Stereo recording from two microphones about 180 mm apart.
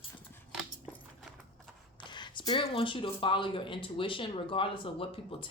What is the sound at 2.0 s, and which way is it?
Speech, 25° left (ahead or behind).